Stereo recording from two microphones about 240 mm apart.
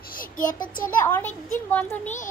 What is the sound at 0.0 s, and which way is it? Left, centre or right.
Child singing, left.